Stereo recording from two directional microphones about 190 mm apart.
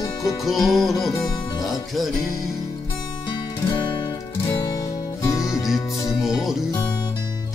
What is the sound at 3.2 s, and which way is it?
Music, 25° left (ahead or behind).